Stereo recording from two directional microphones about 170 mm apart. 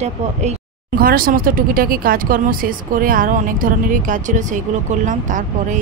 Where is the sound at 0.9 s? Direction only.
60° right (ahead or behind).